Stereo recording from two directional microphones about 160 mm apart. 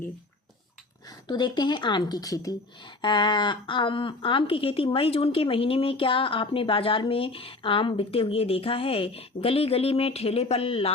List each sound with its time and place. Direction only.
1.3 s speech: 25° left (ahead or behind)